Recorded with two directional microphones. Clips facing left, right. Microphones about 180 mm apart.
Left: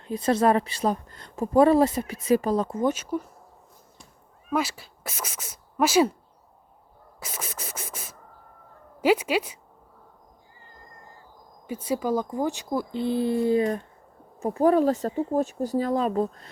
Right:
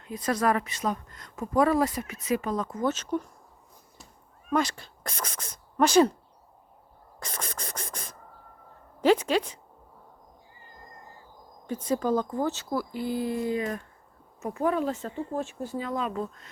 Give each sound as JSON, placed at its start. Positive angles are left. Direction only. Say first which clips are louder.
{"t": 0.0, "sound": "speech", "louder": "left 5 dB", "side_deg": 30}
{"t": 2.8, "sound": "speech", "louder": "left 2 dB", "side_deg": 10}
{"t": 4.5, "sound": "speech", "louder": "even", "side_deg": 5}
{"t": 7.2, "sound": "scratch", "louder": "even", "side_deg": 5}
{"t": 9.0, "sound": "a woman's voice", "louder": "even", "side_deg": 10}
{"t": 11.6, "sound": "speech", "louder": "even", "side_deg": 10}